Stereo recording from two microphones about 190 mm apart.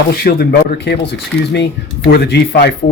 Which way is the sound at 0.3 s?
55° left (ahead or behind).